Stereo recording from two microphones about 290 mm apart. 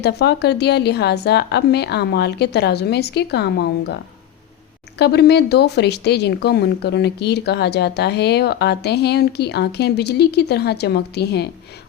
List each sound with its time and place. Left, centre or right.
0.0 s speech: left
4.9 s speech: left